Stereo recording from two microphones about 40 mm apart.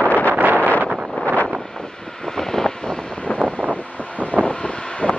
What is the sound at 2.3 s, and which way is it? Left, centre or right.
Vehicle, centre.